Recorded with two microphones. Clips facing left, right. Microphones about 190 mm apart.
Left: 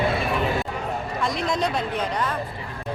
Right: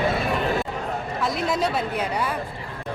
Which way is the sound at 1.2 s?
5° right (ahead or behind).